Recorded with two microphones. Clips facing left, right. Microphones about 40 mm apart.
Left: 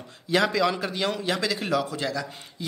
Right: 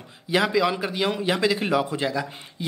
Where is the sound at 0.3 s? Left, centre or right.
Centre.